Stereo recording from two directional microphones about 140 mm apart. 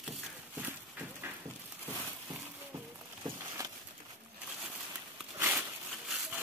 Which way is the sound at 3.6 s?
25° right (ahead or behind).